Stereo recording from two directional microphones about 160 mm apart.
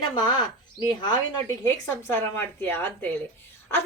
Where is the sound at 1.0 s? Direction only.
25° left (ahead or behind).